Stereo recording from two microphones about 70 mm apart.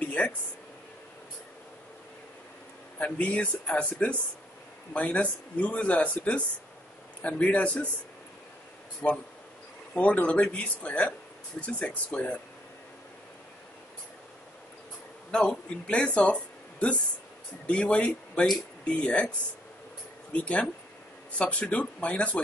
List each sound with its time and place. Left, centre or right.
0.0 s a sound: centre
3.0 s a man's voice: centre
9.0 s a man's voice: left
15.3 s speech: centre
17.6 s speech: centre
20.3 s a man's voice: centre